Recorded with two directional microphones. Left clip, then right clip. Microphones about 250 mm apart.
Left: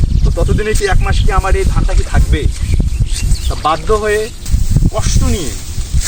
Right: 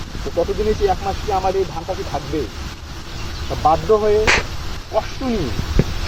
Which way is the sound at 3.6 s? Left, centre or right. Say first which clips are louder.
Left 1 dB; left.